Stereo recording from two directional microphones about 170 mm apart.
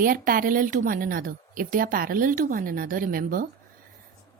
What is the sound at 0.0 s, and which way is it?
A woman's voice, 55° right (ahead or behind).